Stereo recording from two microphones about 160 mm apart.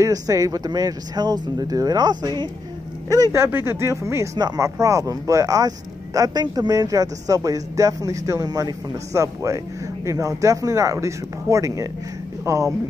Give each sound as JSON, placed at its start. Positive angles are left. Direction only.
{"t": 0.0, "sound": "speech", "side_deg": -20}